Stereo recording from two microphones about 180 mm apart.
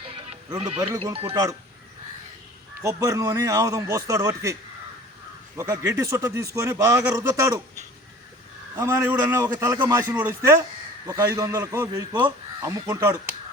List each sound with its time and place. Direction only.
0.0 s music: 30° right (ahead or behind)
1.1 s speech: 30° right (ahead or behind)
2.8 s a man's voice: 20° right (ahead or behind)
5.5 s a man's voice: 20° right (ahead or behind)
8.7 s a man's voice: 15° right (ahead or behind)